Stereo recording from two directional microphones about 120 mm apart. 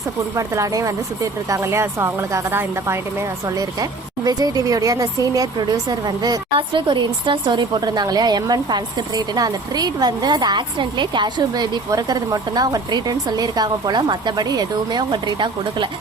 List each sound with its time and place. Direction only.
0.3 s speech: 25° right (ahead or behind)